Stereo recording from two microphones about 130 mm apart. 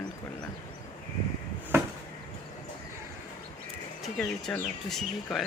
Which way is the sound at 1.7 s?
20° right (ahead or behind).